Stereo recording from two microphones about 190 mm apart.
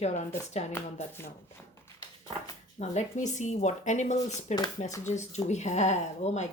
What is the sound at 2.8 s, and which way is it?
Speech, 35° left (ahead or behind).